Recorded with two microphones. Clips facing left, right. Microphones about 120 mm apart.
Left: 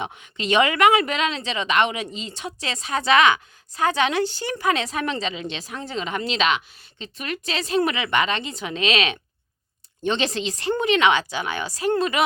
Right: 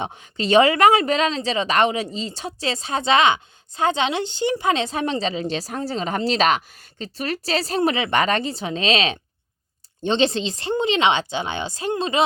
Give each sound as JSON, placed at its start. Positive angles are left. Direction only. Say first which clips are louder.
{"t": 0.0, "sound": "a woman's voice", "louder": "right 3 dB", "side_deg": -35}